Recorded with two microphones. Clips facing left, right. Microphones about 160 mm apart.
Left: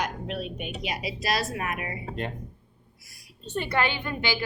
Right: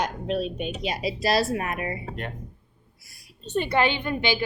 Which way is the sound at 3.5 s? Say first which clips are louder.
Right 4 dB; 20° right (ahead or behind).